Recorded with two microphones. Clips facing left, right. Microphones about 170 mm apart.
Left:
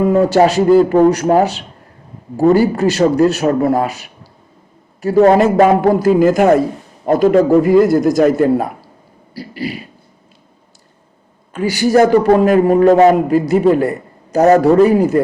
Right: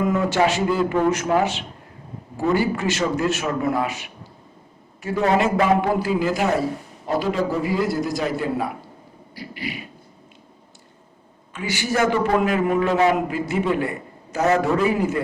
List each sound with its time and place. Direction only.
0.0 s a man's voice: 35° left (ahead or behind)
9.3 s a man's voice: 35° left (ahead or behind)
11.6 s a man's voice: 40° left (ahead or behind)